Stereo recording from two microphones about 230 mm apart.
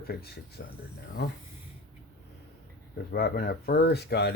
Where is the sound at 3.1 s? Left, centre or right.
Left.